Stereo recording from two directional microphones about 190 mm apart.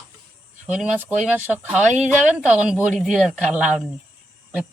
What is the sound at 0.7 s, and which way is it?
A woman's voice, 5° right (ahead or behind).